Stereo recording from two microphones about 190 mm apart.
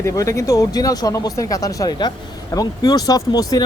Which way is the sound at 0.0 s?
15° left (ahead or behind).